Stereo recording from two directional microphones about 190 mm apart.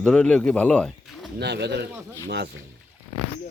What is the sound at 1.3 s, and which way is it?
Speech, 60° right (ahead or behind).